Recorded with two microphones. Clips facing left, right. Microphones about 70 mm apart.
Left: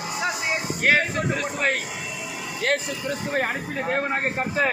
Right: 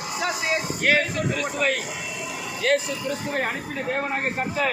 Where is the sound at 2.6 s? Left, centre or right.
Left.